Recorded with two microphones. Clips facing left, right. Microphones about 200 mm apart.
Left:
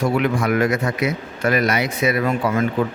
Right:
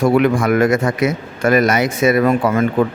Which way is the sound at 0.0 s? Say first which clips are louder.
Right 6 dB; 55° right (ahead or behind).